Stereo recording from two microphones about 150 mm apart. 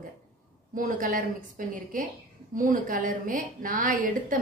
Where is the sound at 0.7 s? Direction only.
65° right (ahead or behind).